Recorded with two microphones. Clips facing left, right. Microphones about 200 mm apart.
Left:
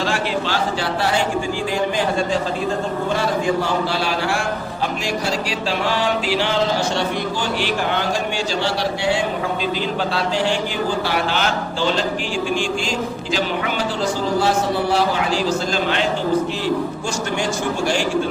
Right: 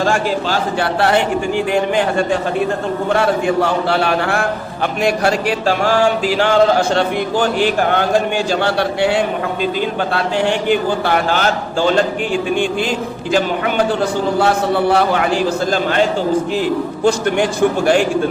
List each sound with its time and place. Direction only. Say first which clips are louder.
0.0 s a man's voice: right 5 dB; 45° right (ahead or behind)
0.9 s a man's voice: right 6 dB; 60° right (ahead or behind)
13.3 s a man's voice: right 7 dB; 55° right (ahead or behind)
17.0 s a man's voice: right 8 dB; 60° right (ahead or behind)